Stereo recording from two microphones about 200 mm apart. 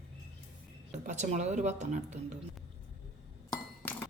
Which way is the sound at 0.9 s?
35° right (ahead or behind).